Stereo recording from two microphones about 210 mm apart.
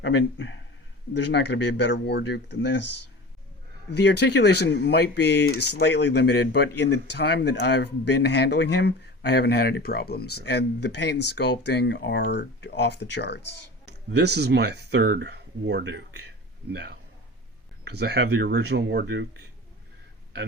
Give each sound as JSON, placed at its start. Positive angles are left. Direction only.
{"t": 0.0, "sound": "speech", "side_deg": 65}
{"t": 4.0, "sound": "speech", "side_deg": 55}
{"t": 13.8, "sound": "speech", "side_deg": -55}
{"t": 17.9, "sound": "speech", "side_deg": -50}